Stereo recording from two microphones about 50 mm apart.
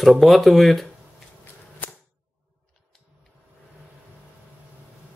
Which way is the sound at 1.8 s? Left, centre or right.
Left.